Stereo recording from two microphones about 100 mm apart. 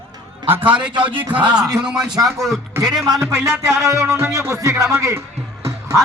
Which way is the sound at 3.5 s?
30° right (ahead or behind).